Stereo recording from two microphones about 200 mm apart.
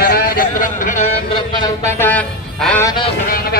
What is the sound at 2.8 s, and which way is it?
Music, 25° left (ahead or behind).